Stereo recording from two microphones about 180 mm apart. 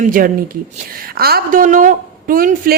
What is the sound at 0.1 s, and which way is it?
A woman's voice, 50° right (ahead or behind).